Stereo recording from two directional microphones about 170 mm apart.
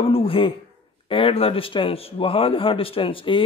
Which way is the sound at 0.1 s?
35° left (ahead or behind).